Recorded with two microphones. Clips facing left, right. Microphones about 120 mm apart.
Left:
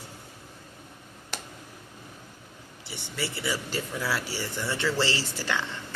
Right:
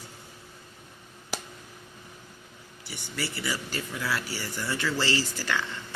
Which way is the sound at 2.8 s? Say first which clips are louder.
Left 1 dB; 25° left (ahead or behind).